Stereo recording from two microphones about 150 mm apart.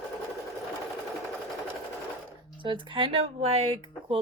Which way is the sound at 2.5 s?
35° right (ahead or behind).